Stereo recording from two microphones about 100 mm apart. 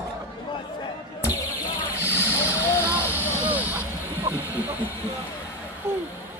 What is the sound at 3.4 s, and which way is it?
Vehicle, 15° right (ahead or behind).